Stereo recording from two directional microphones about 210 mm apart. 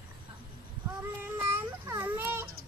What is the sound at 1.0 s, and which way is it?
Child singing, 10° right (ahead or behind).